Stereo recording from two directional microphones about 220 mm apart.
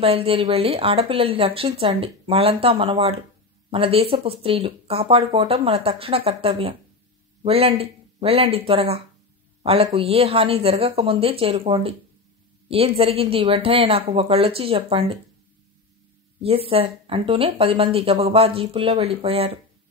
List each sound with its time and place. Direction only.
0.0 s speech: 25° right (ahead or behind)
16.3 s speech: 25° right (ahead or behind)